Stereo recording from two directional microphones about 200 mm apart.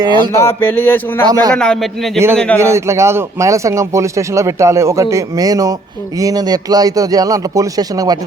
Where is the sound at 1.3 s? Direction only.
20° right (ahead or behind).